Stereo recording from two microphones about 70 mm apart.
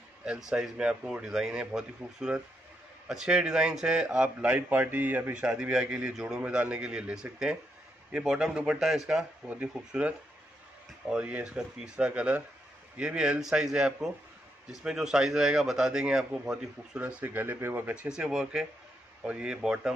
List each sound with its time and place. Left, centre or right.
0.5 s a man's voice: centre
5.3 s a man's voice: centre
9.5 s a man's voice: centre
17.3 s speech: right
18.0 s a man's voice: centre